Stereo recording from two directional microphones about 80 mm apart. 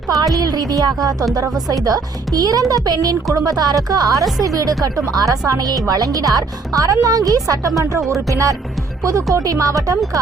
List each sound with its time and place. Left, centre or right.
0.1 s speech: right